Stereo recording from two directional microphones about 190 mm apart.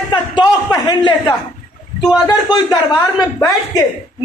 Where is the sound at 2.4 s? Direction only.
20° left (ahead or behind).